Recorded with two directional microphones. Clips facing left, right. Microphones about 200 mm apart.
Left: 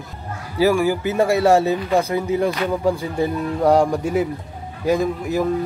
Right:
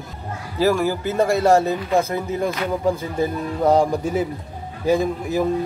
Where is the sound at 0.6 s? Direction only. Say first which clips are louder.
Left 2 dB; 15° left (ahead or behind).